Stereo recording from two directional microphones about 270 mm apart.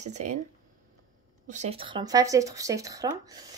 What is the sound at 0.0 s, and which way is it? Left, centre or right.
Speech, right.